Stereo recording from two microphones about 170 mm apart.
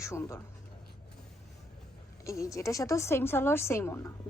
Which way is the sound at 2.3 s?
20° left (ahead or behind).